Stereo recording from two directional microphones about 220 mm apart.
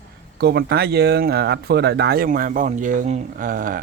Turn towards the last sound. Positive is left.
turn(degrees=-40)  # may be behind; listen again after turning